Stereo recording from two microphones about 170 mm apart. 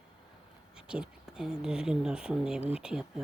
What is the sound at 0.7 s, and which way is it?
Speech, 5° right (ahead or behind).